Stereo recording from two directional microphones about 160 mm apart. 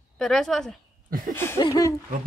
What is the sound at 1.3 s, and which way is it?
Speech, 15° left (ahead or behind).